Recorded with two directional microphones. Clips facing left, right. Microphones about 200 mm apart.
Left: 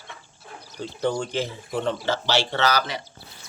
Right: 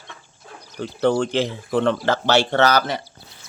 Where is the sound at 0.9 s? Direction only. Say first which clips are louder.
Right 6 dB; 65° right (ahead or behind).